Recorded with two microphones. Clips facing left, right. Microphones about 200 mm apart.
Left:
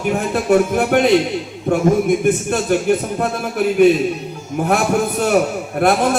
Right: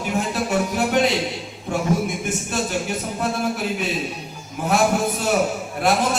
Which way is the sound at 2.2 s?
55° left (ahead or behind).